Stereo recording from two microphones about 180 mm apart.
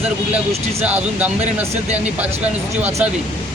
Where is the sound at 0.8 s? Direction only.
10° right (ahead or behind).